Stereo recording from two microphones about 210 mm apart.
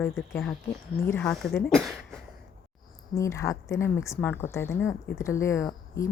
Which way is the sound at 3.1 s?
15° left (ahead or behind).